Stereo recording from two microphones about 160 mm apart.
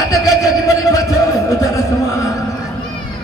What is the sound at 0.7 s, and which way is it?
Music, 20° left (ahead or behind).